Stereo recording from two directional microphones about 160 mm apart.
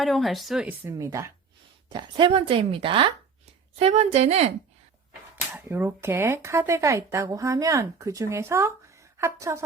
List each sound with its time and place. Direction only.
0.0 s speech: centre (ahead or behind)
0.9 s speech: 20° right (ahead or behind)
1.9 s speech: 30° right (ahead or behind)
5.5 s speech: 15° right (ahead or behind)